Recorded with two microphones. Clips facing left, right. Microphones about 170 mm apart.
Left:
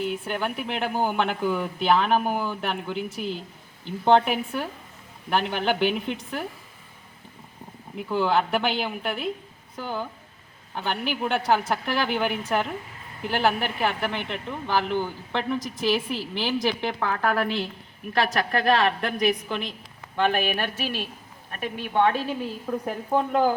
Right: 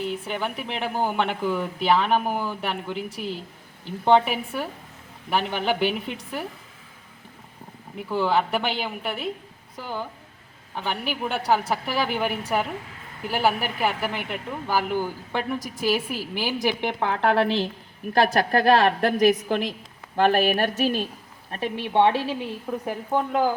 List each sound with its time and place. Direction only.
0.0 s a man's voice: centre (ahead or behind)
7.9 s a man's voice: centre (ahead or behind); by 21.1 s 45° right (ahead or behind)
21.5 s a woman's voice: 30° right (ahead or behind)
22.7 s speech: 5° right (ahead or behind)